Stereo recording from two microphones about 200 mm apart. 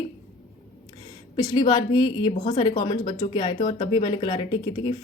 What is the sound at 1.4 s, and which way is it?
Speech, 20° left (ahead or behind).